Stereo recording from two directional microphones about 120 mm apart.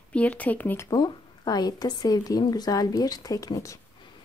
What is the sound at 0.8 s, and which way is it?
A woman's voice, 35° left (ahead or behind).